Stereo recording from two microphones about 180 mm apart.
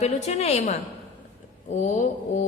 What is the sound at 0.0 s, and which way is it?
Speech, 35° left (ahead or behind).